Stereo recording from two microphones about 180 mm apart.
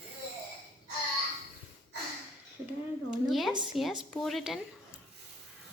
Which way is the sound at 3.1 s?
Centre (ahead or behind).